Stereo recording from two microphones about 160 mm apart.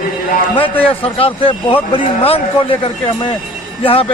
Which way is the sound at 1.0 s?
35° left (ahead or behind).